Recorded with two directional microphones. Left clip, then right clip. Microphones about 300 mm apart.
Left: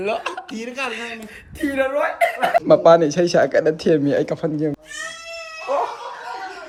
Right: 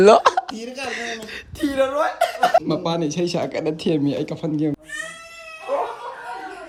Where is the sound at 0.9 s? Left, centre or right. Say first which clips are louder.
Right 1 dB; right.